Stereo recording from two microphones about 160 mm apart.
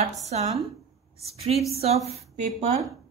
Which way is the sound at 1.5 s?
40° right (ahead or behind).